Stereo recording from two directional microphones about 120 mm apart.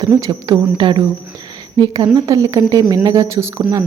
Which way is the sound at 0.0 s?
30° right (ahead or behind).